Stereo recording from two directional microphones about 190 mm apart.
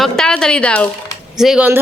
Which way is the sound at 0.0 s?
5° left (ahead or behind).